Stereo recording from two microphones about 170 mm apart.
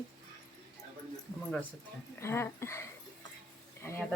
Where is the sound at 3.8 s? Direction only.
15° left (ahead or behind).